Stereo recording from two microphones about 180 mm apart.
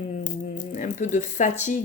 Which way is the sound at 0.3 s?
45° left (ahead or behind).